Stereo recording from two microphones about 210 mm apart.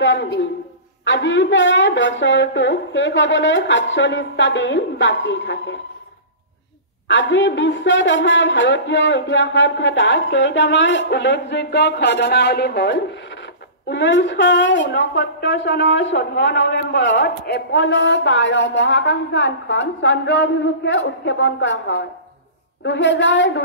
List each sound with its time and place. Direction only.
0.0 s a woman's voice: 60° left (ahead or behind)
7.1 s a woman's voice: 60° left (ahead or behind)